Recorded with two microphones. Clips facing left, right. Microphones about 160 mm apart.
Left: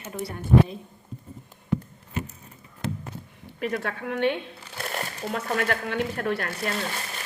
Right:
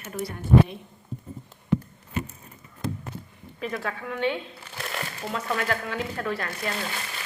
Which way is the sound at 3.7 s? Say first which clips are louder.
Left 2 dB; 55° left (ahead or behind).